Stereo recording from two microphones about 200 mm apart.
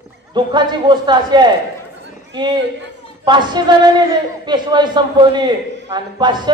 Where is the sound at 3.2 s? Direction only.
20° right (ahead or behind).